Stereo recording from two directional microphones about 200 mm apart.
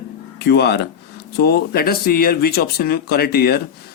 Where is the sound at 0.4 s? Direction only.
55° left (ahead or behind).